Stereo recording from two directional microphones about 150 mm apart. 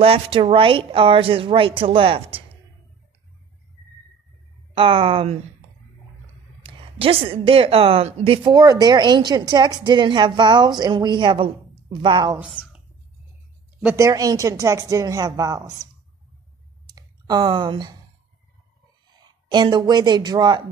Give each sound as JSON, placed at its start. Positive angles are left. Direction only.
{"t": 0.0, "sound": "a woman's voice", "side_deg": -40}
{"t": 4.7, "sound": "a woman's voice", "side_deg": -35}
{"t": 6.6, "sound": "a woman's voice", "side_deg": -40}
{"t": 12.6, "sound": "a sound", "side_deg": 70}
{"t": 13.9, "sound": "a woman's voice", "side_deg": -20}
{"t": 16.8, "sound": "clicking", "side_deg": -25}
{"t": 19.1, "sound": "speech", "side_deg": -30}